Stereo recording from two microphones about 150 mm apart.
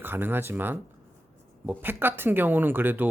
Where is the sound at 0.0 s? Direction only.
15° right (ahead or behind).